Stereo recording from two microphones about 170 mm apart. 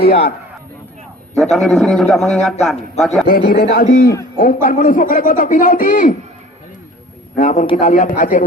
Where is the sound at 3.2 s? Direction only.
60° left (ahead or behind).